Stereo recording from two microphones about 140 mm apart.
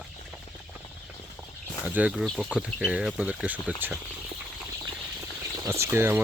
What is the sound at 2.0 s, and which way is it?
Speech, 10° right (ahead or behind).